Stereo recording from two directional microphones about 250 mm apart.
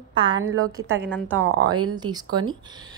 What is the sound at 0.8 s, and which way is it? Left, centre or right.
Speech, right.